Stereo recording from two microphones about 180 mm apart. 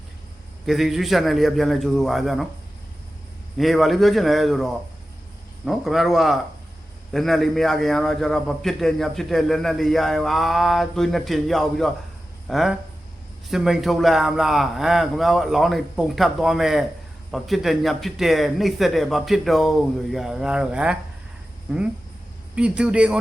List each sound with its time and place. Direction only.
0.6 s a man's voice: centre (ahead or behind)
3.6 s a man's voice: centre (ahead or behind)
22.5 s a man's voice: 5° right (ahead or behind)